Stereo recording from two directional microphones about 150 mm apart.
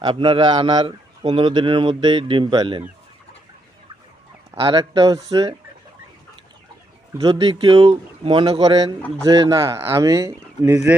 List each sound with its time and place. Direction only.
0.0 s a man's voice: 30° right (ahead or behind)
4.6 s speech: 30° right (ahead or behind)
7.2 s a man's voice: 35° right (ahead or behind)
9.0 s speech: 10° left (ahead or behind)
9.2 s speech: 25° right (ahead or behind)